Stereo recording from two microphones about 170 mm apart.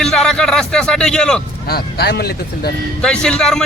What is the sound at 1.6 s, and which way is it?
Speech, 65° left (ahead or behind).